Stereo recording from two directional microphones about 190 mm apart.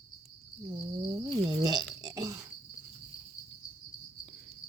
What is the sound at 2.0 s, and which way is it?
Burping, 20° right (ahead or behind).